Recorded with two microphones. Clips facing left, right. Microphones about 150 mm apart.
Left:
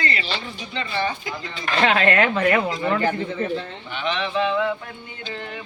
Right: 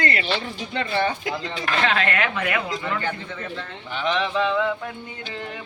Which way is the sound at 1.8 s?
35° left (ahead or behind).